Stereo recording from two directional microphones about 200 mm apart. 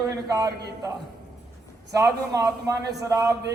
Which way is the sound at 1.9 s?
15° right (ahead or behind).